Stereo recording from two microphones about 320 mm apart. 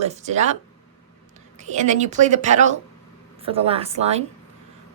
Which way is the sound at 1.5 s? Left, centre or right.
Right.